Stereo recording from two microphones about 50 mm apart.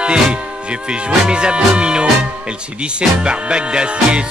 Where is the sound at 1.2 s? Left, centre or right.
Centre.